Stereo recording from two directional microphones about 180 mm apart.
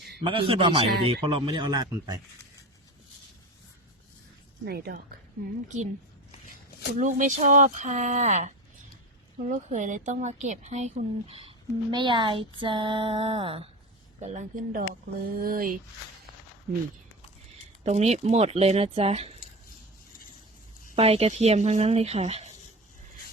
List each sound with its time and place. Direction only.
0.2 s a man's voice: 30° right (ahead or behind)
4.6 s a woman's voice: 60° right (ahead or behind)
5.6 s a woman's voice: 40° right (ahead or behind)
6.9 s a woman's voice: 45° right (ahead or behind)
14.2 s speech: 40° right (ahead or behind)
17.8 s a woman's voice: 35° right (ahead or behind)
20.9 s a woman's voice: 35° right (ahead or behind)